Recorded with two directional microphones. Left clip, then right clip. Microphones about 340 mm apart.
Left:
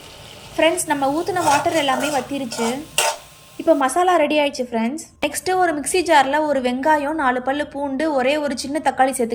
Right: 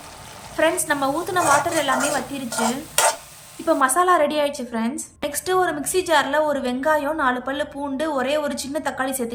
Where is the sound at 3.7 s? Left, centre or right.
Centre.